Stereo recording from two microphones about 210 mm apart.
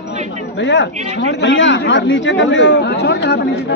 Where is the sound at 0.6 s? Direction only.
55° left (ahead or behind).